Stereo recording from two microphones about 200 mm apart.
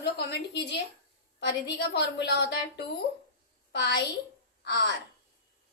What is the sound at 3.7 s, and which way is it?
Speech, 60° left (ahead or behind).